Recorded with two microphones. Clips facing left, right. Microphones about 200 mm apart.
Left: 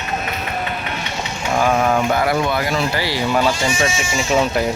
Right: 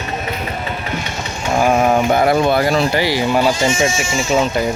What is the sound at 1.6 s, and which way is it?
Speech, 20° right (ahead or behind).